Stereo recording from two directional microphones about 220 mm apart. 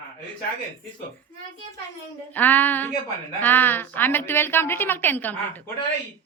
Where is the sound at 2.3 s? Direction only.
10° left (ahead or behind).